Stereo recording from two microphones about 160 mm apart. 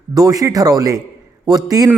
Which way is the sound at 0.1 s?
25° right (ahead or behind).